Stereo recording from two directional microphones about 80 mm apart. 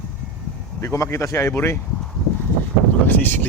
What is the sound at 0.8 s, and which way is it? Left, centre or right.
Speech, left.